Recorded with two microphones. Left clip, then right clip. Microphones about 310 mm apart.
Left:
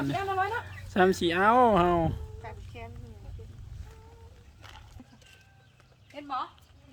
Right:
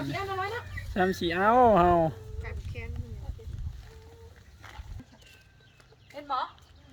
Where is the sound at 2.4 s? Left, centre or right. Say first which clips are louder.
Right 3 dB; centre.